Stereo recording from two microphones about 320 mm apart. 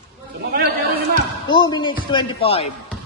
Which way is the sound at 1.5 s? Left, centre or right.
Centre.